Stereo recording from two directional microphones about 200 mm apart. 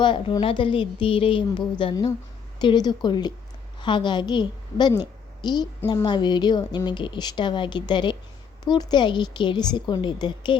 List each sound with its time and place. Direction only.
0.0 s a woman's voice: 25° left (ahead or behind)